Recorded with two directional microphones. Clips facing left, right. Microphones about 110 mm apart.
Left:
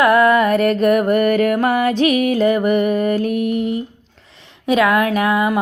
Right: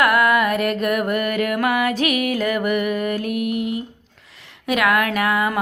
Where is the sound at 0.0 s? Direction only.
30° left (ahead or behind).